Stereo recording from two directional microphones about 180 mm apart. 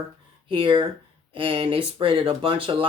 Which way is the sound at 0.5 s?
30° right (ahead or behind).